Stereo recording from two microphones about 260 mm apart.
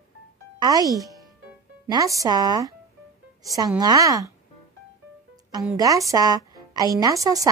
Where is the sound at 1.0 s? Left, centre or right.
Centre.